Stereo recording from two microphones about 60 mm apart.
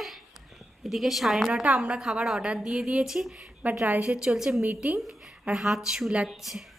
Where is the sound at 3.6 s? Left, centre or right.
Right.